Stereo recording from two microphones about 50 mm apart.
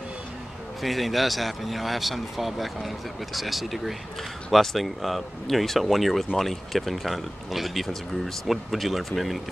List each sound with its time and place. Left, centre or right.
0.8 s speech: centre